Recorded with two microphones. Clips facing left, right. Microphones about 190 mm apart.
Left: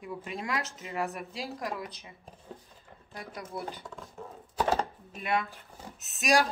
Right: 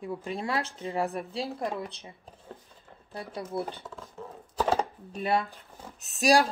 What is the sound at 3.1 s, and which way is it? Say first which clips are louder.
Speech: right 5 dB; 30° right (ahead or behind).